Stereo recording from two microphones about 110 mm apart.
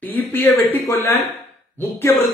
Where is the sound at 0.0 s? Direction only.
15° left (ahead or behind).